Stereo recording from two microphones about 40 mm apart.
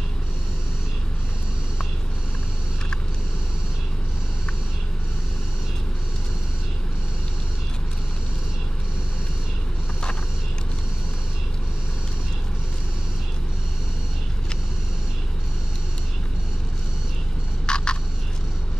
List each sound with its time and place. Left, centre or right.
17.6 s frog: left